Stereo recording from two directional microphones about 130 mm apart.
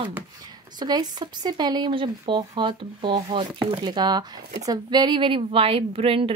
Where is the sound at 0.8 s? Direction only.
35° right (ahead or behind).